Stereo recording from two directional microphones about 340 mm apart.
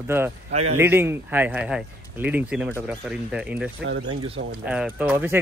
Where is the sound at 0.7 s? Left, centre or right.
Centre.